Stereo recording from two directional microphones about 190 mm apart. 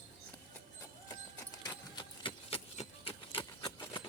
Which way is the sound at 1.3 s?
20° left (ahead or behind).